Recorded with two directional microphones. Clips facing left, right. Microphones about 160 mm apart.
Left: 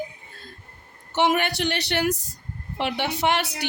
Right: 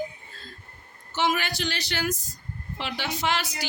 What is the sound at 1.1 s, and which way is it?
Music, 65° left (ahead or behind).